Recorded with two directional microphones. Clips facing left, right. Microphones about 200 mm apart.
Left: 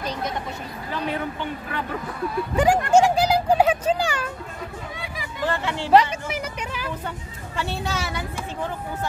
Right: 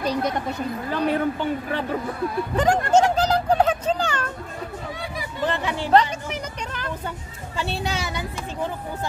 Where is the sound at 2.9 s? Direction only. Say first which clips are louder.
Even; 10° left (ahead or behind).